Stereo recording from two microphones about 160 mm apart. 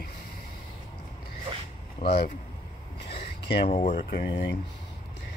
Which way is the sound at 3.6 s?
40° left (ahead or behind).